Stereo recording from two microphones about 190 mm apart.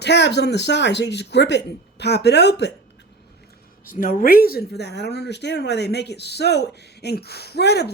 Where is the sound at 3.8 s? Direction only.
45° left (ahead or behind).